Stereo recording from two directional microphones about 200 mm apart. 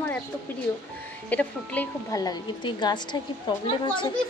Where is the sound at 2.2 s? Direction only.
25° left (ahead or behind).